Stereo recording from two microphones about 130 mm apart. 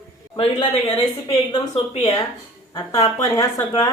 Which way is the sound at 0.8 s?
25° left (ahead or behind).